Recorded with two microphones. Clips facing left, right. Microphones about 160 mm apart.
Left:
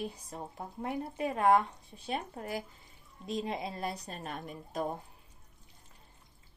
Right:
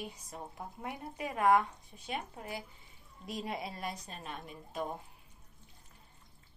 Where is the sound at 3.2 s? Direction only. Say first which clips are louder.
Left 4 dB; 25° left (ahead or behind).